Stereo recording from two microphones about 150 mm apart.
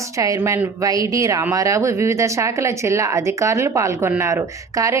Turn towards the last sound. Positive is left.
turn(degrees=-20)  # may be behind; listen again after turning